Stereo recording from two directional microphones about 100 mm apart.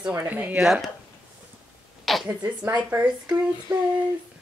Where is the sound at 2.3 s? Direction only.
20° right (ahead or behind).